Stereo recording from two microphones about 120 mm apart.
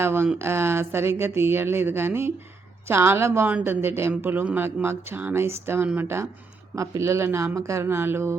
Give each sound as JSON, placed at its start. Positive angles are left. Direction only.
{"t": 0.0, "sound": "speech", "side_deg": -20}